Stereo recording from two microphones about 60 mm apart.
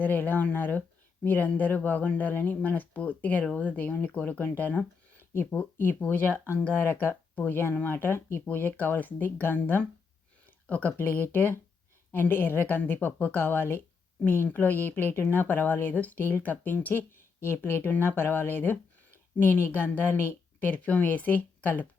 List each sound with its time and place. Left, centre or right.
0.0 s a woman's voice: left
5.3 s a woman's voice: left
10.4 s a sound: left
10.9 s a woman's voice: left